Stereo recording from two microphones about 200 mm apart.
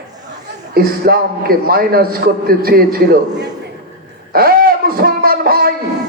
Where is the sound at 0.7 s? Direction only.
50° right (ahead or behind).